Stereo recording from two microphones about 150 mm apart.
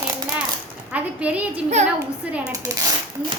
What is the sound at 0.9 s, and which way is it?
Speech, 10° right (ahead or behind).